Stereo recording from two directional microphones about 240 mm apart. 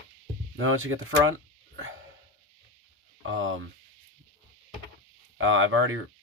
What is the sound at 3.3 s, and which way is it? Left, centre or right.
Speech, right.